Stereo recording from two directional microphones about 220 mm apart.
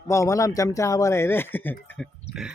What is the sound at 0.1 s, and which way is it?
Speech, 15° left (ahead or behind).